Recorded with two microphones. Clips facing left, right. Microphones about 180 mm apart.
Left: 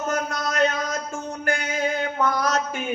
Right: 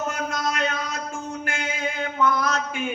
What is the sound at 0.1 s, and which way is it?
Music, 40° left (ahead or behind).